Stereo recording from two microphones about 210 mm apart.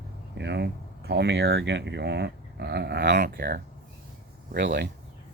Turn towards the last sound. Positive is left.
turn(degrees=-55)  # may be behind; listen again after turning